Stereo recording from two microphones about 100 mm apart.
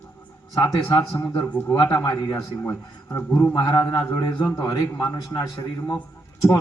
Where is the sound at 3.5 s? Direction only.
45° left (ahead or behind).